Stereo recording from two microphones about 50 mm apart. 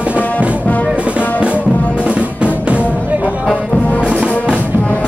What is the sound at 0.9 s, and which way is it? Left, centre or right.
Music, right.